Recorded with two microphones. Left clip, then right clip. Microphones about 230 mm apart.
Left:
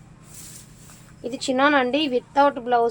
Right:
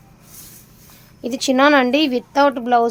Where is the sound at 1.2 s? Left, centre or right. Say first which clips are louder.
Right 5 dB; right.